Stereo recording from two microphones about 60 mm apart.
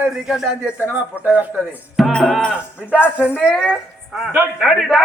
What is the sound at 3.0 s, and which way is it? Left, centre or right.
Speech, left.